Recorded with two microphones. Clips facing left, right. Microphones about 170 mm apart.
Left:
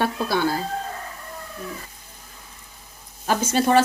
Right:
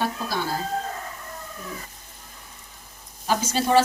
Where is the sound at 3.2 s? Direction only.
55° left (ahead or behind).